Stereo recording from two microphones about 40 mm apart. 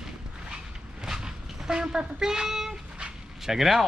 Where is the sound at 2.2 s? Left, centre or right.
Centre.